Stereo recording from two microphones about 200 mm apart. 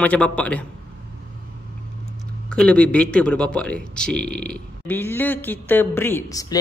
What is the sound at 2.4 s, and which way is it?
Speech, 5° left (ahead or behind).